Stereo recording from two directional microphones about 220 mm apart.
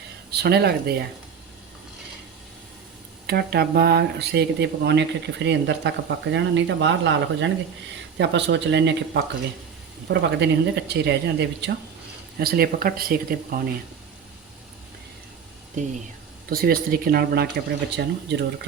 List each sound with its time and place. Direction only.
0.3 s speech: 50° right (ahead or behind)
3.2 s speech: 45° right (ahead or behind)
16.5 s speech: 40° right (ahead or behind)